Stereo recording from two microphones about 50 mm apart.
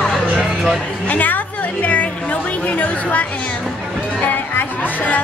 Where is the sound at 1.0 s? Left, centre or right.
Left.